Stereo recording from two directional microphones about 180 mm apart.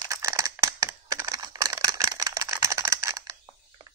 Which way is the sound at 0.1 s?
15° right (ahead or behind).